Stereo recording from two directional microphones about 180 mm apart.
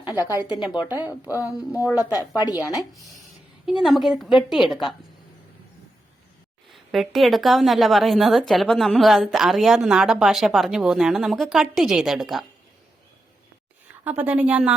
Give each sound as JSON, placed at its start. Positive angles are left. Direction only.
{"t": 0.0, "sound": "speech", "side_deg": 20}
{"t": 0.3, "sound": "speech", "side_deg": -10}
{"t": 2.1, "sound": "speech", "side_deg": 20}
{"t": 3.7, "sound": "a woman's voice", "side_deg": 0}
{"t": 6.7, "sound": "a woman's voice", "side_deg": 0}
{"t": 14.0, "sound": "speech", "side_deg": -10}